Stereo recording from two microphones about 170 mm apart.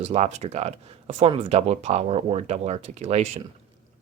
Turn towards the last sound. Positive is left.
turn(degrees=-40)  # may be behind; listen again after turning